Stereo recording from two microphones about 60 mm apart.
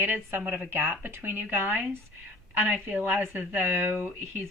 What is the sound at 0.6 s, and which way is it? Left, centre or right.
A woman's voice, right.